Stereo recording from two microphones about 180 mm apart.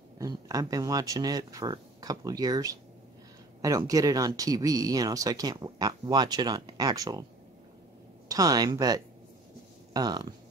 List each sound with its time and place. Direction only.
0.2 s speech: 20° right (ahead or behind)
8.3 s speech: 20° right (ahead or behind)